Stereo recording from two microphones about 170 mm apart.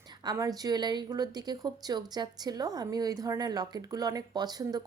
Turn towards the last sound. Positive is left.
turn(degrees=-25)  # may be behind; listen again after turning